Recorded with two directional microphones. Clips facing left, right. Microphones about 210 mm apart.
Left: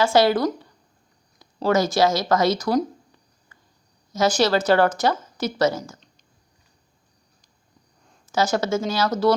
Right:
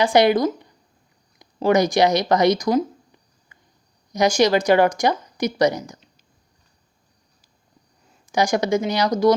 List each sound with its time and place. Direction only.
0.0 s speech: 15° right (ahead or behind)
3.5 s a sound: 15° right (ahead or behind)
4.1 s a woman's voice: 15° right (ahead or behind)
8.0 s speech: 10° right (ahead or behind)